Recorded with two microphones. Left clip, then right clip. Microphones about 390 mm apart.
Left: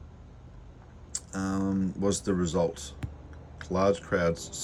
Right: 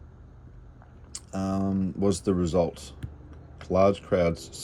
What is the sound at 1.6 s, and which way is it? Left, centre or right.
Speech, right.